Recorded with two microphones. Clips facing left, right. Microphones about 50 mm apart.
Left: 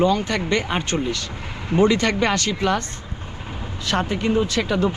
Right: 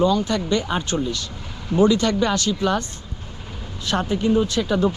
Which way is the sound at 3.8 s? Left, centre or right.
Left.